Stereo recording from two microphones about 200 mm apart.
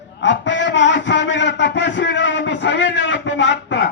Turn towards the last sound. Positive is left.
turn(degrees=60)  # may be behind; listen again after turning